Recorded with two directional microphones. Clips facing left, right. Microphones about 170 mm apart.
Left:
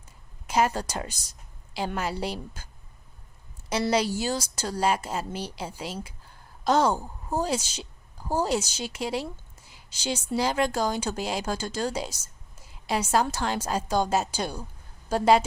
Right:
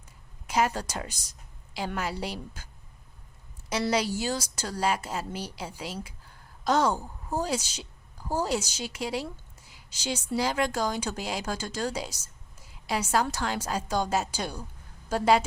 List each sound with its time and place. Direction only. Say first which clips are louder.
0.4 s a woman's voice: left 2 dB; 30° left (ahead or behind)
3.7 s a woman's voice: left 2 dB; 25° left (ahead or behind)